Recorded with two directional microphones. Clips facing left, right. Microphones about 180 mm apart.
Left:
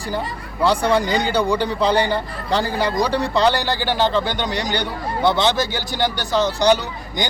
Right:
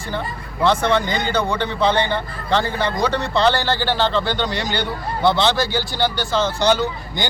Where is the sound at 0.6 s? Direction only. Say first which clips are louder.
Even; 10° left (ahead or behind).